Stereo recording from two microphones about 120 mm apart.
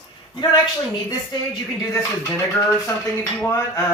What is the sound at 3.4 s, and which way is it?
Speech, 25° left (ahead or behind).